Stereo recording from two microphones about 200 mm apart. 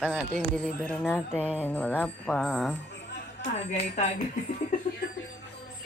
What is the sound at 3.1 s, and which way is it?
Speech, 40° left (ahead or behind).